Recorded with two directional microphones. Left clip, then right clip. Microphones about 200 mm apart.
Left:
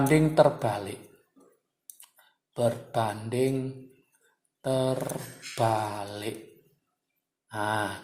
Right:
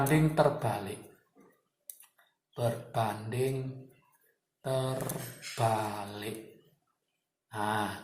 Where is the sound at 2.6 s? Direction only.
45° left (ahead or behind).